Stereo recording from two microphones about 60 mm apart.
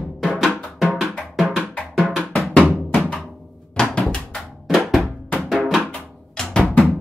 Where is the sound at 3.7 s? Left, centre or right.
Centre.